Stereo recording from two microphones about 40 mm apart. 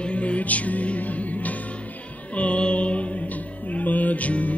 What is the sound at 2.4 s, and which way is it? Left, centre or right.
Music, left.